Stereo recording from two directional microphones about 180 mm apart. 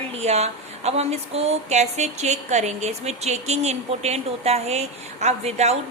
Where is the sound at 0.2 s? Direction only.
35° right (ahead or behind).